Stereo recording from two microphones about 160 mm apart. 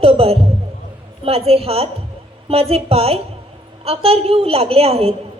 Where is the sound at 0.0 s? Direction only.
35° right (ahead or behind).